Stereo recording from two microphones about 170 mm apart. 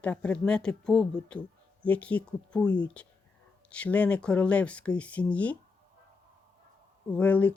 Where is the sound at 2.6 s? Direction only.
25° left (ahead or behind).